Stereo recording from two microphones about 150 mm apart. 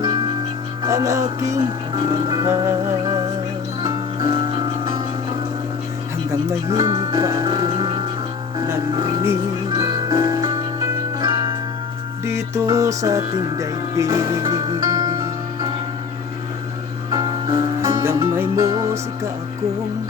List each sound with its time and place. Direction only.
0.0 s music: 25° right (ahead or behind)
6.5 s music: 20° right (ahead or behind)
9.6 s music: 25° right (ahead or behind)
12.2 s speech: 20° right (ahead or behind)
17.1 s music: 30° right (ahead or behind)